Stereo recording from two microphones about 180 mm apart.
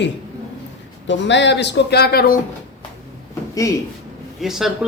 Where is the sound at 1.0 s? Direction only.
80° left; by 2.4 s 55° left (ahead or behind).